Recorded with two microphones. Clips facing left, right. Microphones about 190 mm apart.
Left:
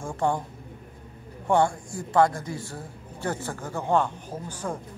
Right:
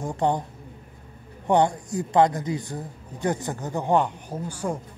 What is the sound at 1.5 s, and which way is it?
A man's voice, 20° right (ahead or behind).